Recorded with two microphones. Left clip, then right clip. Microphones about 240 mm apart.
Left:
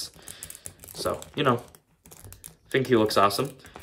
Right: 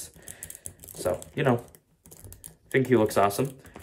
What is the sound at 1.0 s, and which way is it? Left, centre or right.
Speech, centre.